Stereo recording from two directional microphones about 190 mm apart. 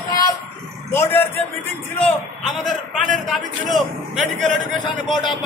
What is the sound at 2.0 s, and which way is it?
Speech, centre (ahead or behind).